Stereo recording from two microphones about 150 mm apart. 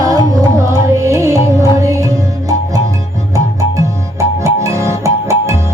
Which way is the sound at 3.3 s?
20° right (ahead or behind).